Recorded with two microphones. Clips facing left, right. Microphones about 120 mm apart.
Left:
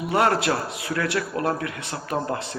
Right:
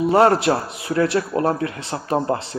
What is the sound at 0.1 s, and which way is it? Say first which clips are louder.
A man's voice: right 5 dB; 30° right (ahead or behind).